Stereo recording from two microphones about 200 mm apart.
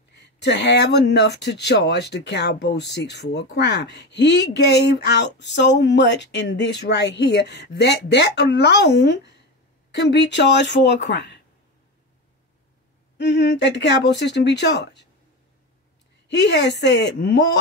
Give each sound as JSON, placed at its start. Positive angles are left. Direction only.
{"t": 0.1, "sound": "speech", "side_deg": 60}
{"t": 13.2, "sound": "speech", "side_deg": 60}
{"t": 16.3, "sound": "speech", "side_deg": 60}